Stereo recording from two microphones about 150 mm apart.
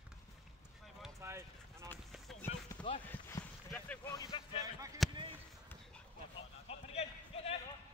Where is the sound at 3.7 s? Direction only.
10° left (ahead or behind).